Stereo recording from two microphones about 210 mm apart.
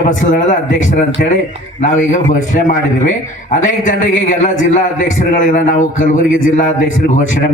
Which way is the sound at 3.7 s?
35° left (ahead or behind).